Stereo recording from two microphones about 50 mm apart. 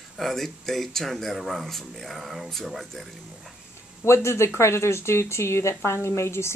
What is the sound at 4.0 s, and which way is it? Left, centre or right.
A woman's voice, left.